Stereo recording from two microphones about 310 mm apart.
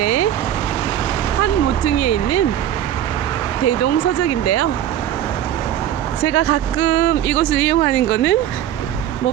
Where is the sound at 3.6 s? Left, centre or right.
Left.